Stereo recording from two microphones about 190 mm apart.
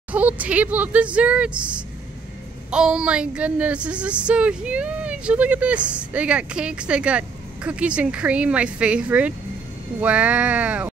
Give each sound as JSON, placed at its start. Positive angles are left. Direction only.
{"t": 0.1, "sound": "speech", "side_deg": -5}